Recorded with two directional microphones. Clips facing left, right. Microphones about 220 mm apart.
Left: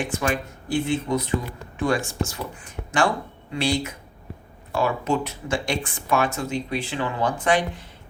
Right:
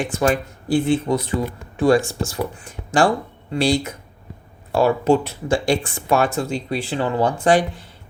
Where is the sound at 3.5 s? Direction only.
35° right (ahead or behind).